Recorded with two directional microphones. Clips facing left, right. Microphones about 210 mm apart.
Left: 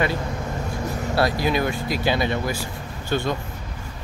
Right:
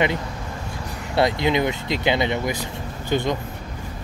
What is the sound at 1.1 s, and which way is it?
Speech, 20° right (ahead or behind).